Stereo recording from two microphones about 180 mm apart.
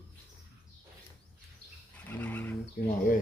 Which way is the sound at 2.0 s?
10° left (ahead or behind).